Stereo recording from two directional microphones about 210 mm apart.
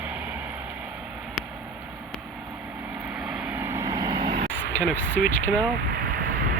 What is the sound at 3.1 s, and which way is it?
Vehicle, 5° right (ahead or behind).